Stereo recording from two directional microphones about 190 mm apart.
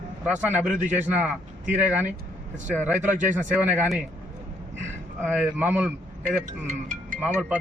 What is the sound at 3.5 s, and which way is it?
Speech, 10° right (ahead or behind).